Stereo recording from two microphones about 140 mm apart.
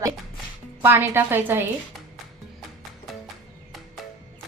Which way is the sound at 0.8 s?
15° right (ahead or behind).